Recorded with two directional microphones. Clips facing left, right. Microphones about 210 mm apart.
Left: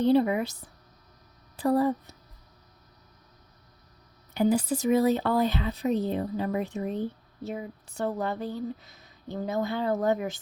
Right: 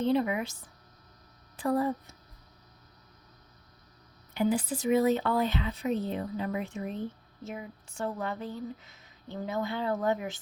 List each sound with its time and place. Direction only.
0.0 s speech: 35° left (ahead or behind)
1.5 s speech: 35° left (ahead or behind)
4.4 s speech: 40° left (ahead or behind)